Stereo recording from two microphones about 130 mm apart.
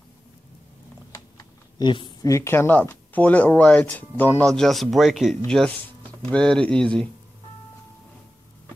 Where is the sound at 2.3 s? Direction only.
20° left (ahead or behind).